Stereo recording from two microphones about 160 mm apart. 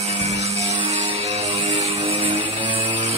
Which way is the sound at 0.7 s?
40° right (ahead or behind).